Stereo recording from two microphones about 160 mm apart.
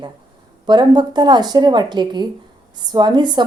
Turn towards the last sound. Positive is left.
turn(degrees=-25)  # may be behind; listen again after turning